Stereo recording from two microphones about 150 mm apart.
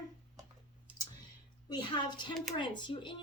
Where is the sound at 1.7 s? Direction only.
30° left (ahead or behind).